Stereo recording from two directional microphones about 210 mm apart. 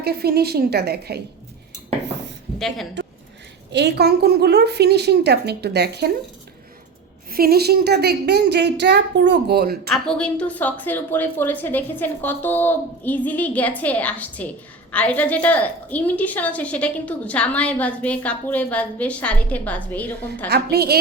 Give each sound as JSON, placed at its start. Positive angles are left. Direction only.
{"t": 0.0, "sound": "a woman's voice", "side_deg": -50}
{"t": 2.6, "sound": "a woman's voice", "side_deg": 0}
{"t": 3.7, "sound": "a woman's voice", "side_deg": -55}
{"t": 7.3, "sound": "a woman's voice", "side_deg": -45}
{"t": 9.9, "sound": "a woman's voice", "side_deg": 5}
{"t": 20.5, "sound": "a woman's voice", "side_deg": -50}